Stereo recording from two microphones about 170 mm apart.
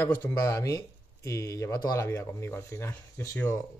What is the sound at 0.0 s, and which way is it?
Speech, 15° left (ahead or behind).